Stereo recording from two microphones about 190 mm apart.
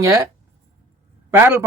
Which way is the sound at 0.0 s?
15° right (ahead or behind).